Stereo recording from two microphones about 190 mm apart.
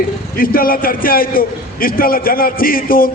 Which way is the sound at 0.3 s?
50° left (ahead or behind).